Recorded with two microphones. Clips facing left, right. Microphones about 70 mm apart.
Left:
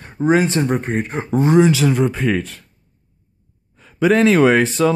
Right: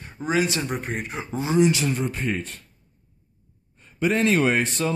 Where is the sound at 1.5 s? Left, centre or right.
Left.